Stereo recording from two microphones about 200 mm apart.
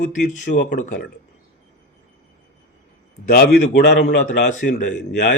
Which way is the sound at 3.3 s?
50° left (ahead or behind).